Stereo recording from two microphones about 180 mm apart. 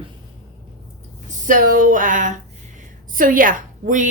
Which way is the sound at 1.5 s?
50° right (ahead or behind).